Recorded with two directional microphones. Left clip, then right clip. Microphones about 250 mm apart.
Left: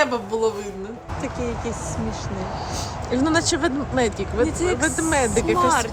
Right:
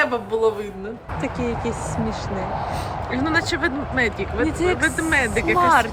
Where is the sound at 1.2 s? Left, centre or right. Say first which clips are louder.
Right 3 dB; right.